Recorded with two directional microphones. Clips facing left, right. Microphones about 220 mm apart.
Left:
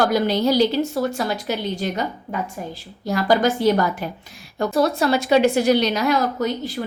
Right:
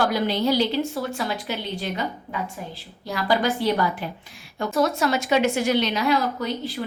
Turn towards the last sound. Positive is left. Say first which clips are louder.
# left 4 dB
turn(degrees=45)  # may be behind; listen again after turning